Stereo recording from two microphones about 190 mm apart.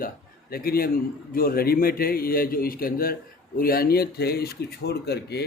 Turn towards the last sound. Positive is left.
turn(degrees=60)  # may be behind; listen again after turning